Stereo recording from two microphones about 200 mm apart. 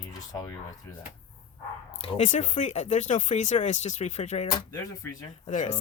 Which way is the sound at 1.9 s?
30° left (ahead or behind).